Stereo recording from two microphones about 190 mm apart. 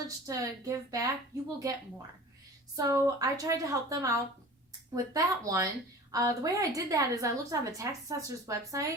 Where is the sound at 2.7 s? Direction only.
15° right (ahead or behind).